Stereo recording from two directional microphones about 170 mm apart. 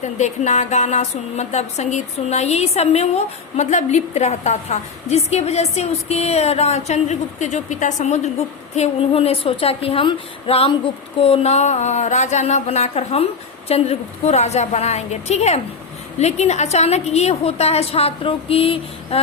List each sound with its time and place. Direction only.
0.0 s speech: 45° left (ahead or behind)